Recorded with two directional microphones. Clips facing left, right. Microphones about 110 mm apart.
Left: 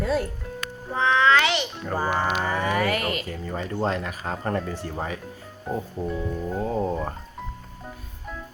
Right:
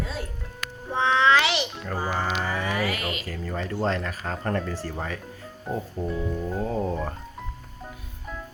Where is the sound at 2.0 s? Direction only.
55° left (ahead or behind).